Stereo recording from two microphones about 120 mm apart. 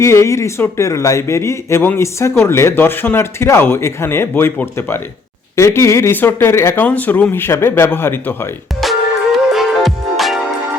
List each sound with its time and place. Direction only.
0.0 s a man's voice: 25° left (ahead or behind)
8.8 s music: centre (ahead or behind)